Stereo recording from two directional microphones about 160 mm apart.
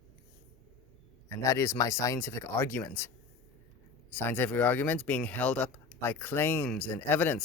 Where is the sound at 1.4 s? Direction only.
20° left (ahead or behind).